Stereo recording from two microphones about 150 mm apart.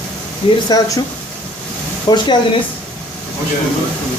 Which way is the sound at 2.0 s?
30° left (ahead or behind).